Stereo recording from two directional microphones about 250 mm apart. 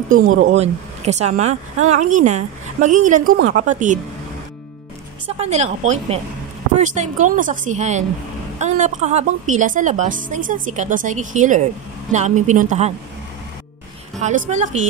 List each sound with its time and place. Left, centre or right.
0.3 s speech: right
0.6 s a woman's voice: right
5.4 s a woman's voice: right
14.2 s a woman's voice: right